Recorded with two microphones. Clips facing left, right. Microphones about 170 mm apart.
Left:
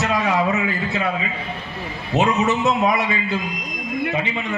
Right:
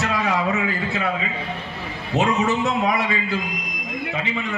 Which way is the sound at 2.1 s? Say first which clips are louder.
Left 1 dB; 20° left (ahead or behind).